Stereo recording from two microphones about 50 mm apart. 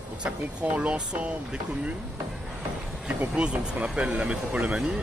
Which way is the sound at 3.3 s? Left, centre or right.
Right.